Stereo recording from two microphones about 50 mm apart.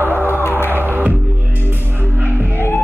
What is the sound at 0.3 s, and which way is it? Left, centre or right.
Music, left.